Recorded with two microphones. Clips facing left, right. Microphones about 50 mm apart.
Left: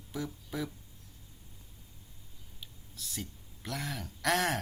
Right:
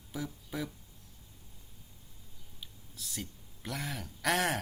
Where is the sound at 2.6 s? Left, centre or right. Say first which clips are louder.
Even; centre.